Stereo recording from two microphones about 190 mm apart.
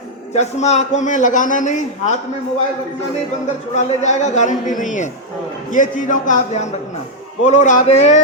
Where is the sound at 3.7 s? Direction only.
35° left (ahead or behind).